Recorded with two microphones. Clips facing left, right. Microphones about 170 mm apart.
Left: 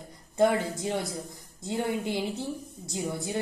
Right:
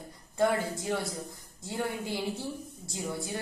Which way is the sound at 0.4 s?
20° left (ahead or behind).